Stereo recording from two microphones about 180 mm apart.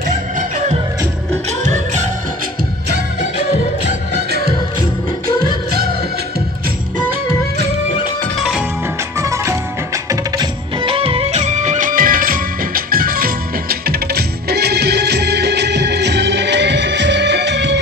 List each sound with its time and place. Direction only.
0.4 s music: 45° right (ahead or behind)
5.3 s music: 20° left (ahead or behind)
8.4 s music: centre (ahead or behind)
9.2 s music: 15° right (ahead or behind); by 17.7 s 70° right (ahead or behind)